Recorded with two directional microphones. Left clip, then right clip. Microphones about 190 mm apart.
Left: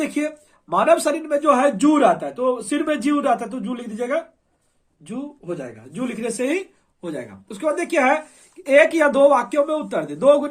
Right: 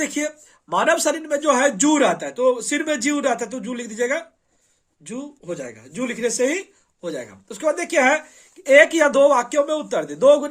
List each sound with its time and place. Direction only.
0.7 s speech: 20° right (ahead or behind)